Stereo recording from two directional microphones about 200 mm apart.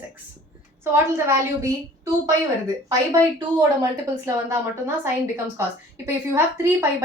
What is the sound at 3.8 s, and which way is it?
Speech, 15° right (ahead or behind).